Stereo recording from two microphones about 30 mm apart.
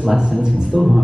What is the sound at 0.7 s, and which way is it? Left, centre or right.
Speech, centre.